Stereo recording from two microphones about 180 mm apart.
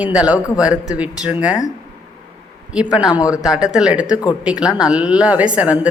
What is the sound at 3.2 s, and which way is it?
Speech, 20° left (ahead or behind).